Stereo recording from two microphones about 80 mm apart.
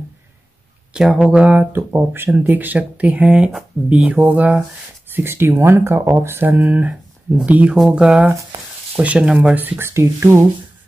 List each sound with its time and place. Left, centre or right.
0.9 s speech: centre
1.4 s speech: centre
1.7 s speech: right
5.1 s speech: right